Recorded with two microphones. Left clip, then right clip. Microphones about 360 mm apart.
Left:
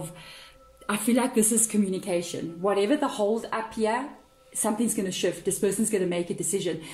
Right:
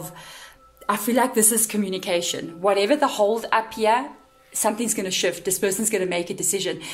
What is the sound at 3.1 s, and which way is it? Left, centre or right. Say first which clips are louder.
Speech: right 5 dB; right.